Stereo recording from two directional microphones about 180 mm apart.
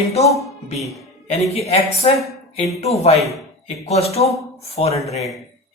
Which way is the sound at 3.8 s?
35° left (ahead or behind).